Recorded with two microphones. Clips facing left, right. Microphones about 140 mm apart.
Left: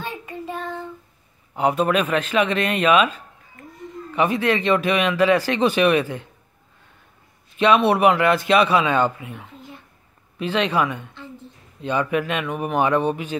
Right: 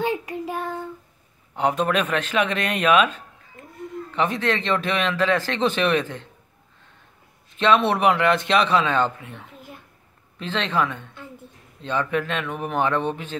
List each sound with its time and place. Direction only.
0.3 s child singing: 10° right (ahead or behind)
1.5 s a man's voice: 5° left (ahead or behind)
3.6 s a sound: 20° right (ahead or behind)
4.1 s speech: 10° left (ahead or behind)
7.5 s a man's voice: 10° left (ahead or behind)